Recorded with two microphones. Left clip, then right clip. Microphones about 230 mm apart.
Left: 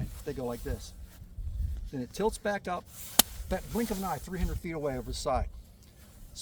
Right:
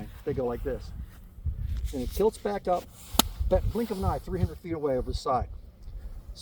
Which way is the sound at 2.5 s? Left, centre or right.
Left.